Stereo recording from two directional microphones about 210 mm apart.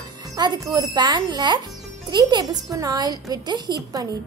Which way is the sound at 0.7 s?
20° right (ahead or behind).